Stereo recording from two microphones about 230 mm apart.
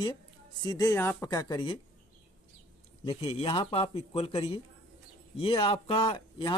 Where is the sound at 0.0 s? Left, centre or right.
Centre.